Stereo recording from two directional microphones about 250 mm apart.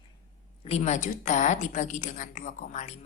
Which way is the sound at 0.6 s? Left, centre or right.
Left.